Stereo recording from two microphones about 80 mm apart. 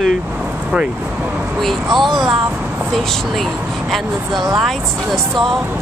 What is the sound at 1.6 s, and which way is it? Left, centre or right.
Speech, centre.